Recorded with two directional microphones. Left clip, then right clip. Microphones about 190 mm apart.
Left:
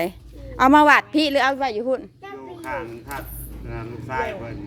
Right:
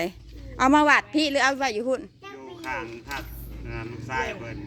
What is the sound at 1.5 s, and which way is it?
A woman's voice, 15° right (ahead or behind).